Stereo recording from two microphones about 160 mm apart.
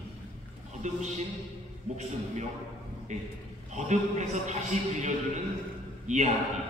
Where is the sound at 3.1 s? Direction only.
50° right (ahead or behind).